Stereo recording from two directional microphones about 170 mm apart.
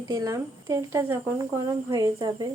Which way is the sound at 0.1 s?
20° right (ahead or behind).